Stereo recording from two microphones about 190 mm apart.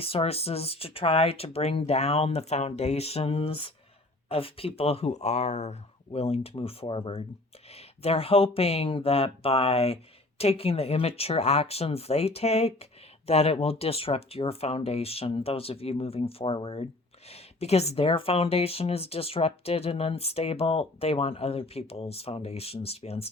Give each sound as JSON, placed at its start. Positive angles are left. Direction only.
{"t": 0.0, "sound": "speech", "side_deg": 30}